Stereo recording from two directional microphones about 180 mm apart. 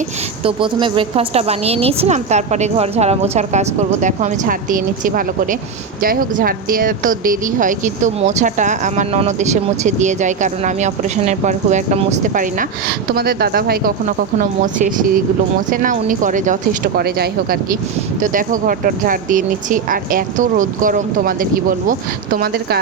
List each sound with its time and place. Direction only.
0.4 s a woman's voice: 30° right (ahead or behind); by 12.6 s 45° right (ahead or behind)
13.1 s speech: 60° right (ahead or behind)
14.3 s speech: 45° right (ahead or behind)
18.2 s speech: 45° right (ahead or behind)